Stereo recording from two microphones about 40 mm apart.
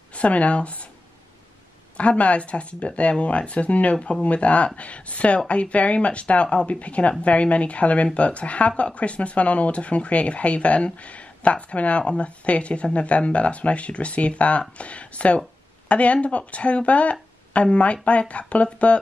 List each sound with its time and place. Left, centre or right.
0.1 s speech: left
2.0 s speech: left
3.9 s speech: left
4.2 s speech: left